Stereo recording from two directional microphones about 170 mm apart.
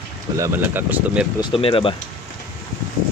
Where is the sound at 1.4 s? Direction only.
30° left (ahead or behind).